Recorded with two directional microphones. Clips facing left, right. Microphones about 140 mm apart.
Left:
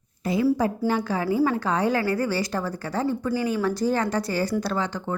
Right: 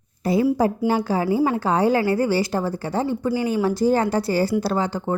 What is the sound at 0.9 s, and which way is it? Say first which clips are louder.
A woman's voice: right 4 dB; 30° right (ahead or behind).